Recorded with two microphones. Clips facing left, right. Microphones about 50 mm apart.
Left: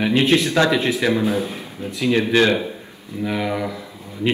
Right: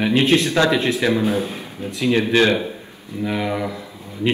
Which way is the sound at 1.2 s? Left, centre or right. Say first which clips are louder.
Even; right.